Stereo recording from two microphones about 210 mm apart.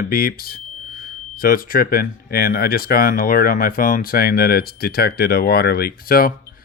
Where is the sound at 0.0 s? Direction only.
45° left (ahead or behind).